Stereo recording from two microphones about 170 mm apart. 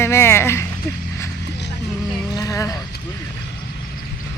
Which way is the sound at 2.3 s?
20° left (ahead or behind).